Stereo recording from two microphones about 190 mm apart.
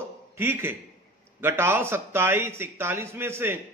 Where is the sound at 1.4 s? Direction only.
10° right (ahead or behind).